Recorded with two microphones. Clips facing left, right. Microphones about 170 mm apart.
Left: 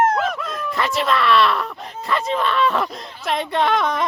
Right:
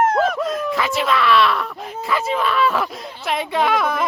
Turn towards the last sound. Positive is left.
turn(degrees=-5)  # may be behind; listen again after turning